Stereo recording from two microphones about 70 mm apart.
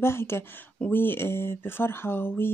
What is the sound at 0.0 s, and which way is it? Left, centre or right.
Speech, left.